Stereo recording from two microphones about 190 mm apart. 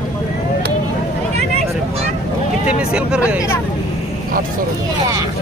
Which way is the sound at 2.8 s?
5° right (ahead or behind).